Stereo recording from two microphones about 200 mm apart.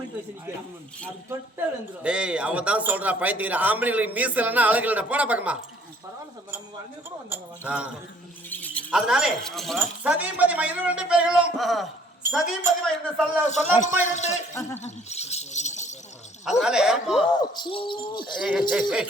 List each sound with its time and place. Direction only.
2.0 s a man's voice: 5° right (ahead or behind)
7.3 s a man's voice: 5° right (ahead or behind)
8.4 s a sound: 10° left (ahead or behind)
8.9 s speech: 5° right (ahead or behind)
13.5 s a man's voice: 35° left (ahead or behind)
14.5 s speech: 15° left (ahead or behind)
14.8 s speech: 35° left (ahead or behind)
16.5 s speech: 5° right (ahead or behind)
17.4 s speech: 20° left (ahead or behind)
18.3 s speech: centre (ahead or behind)